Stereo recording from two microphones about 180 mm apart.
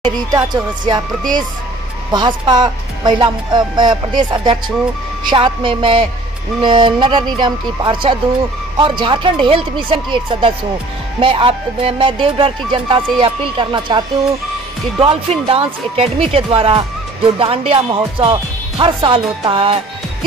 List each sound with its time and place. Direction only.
0.0 s speech: 20° right (ahead or behind)
2.1 s speech: 25° right (ahead or behind)